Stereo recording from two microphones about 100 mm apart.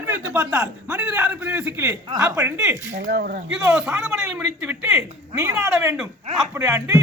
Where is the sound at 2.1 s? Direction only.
35° right (ahead or behind).